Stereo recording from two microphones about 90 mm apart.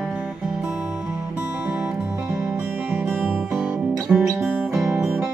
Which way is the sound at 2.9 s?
15° right (ahead or behind).